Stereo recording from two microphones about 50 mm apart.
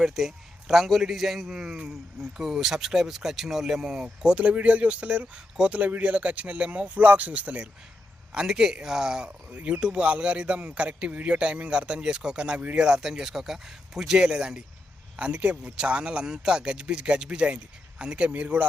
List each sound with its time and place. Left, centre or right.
0.0 s a man's voice: centre
1.9 s speech: centre
4.0 s speech: right
8.3 s speech: centre
18.3 s speech: right